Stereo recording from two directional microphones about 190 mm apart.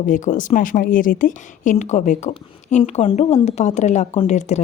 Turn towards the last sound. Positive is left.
turn(degrees=40)  # may be behind; listen again after turning